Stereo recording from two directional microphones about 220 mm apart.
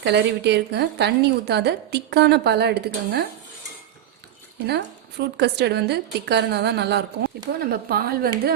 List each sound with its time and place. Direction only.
0.0 s a woman's voice: 50° right (ahead or behind)
4.6 s a woman's voice: 50° right (ahead or behind)